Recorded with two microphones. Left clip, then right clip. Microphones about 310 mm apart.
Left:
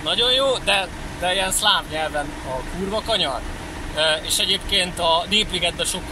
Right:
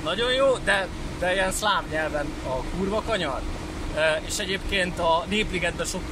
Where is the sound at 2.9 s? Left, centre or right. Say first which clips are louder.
Left 6 dB; centre.